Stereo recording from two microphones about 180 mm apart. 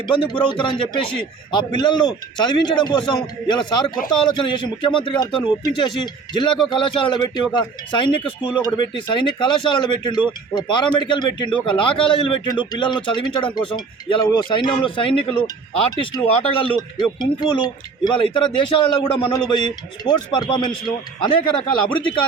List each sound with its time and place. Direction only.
0.1 s speech: 25° left (ahead or behind)